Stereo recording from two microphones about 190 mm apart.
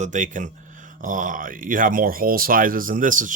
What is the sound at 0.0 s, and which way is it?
Speech, 40° right (ahead or behind).